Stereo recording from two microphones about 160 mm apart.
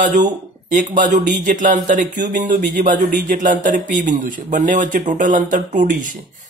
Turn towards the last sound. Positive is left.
turn(degrees=-55)  # may be behind; listen again after turning